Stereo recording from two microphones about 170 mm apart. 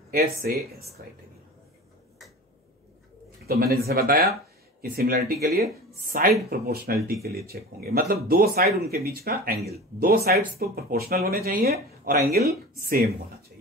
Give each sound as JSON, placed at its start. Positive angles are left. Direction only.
{"t": 0.4, "sound": "speech", "side_deg": -55}
{"t": 3.4, "sound": "speech", "side_deg": -65}